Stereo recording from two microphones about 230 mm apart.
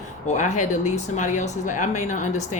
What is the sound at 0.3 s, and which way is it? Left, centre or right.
Speech, left.